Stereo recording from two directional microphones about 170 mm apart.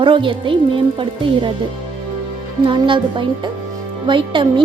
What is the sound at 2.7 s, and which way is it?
Speech, 30° right (ahead or behind).